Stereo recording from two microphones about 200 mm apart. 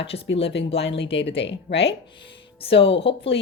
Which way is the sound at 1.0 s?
60° left (ahead or behind).